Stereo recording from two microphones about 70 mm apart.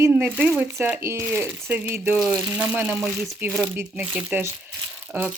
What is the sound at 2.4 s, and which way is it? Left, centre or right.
Speech, centre.